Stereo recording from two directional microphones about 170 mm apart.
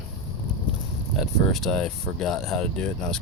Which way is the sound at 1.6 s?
5° left (ahead or behind).